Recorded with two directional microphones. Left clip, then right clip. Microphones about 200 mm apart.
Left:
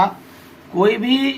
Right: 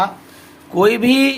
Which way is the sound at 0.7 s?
30° right (ahead or behind).